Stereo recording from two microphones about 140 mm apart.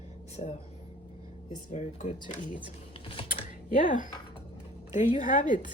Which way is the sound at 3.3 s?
70° left (ahead or behind).